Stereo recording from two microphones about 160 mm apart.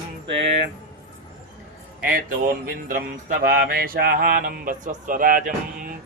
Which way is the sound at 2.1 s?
60° right (ahead or behind).